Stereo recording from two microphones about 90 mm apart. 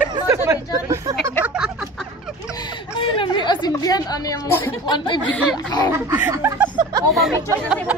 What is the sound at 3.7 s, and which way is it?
A woman's voice, 40° left (ahead or behind).